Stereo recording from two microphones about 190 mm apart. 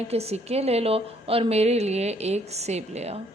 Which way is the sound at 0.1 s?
35° right (ahead or behind).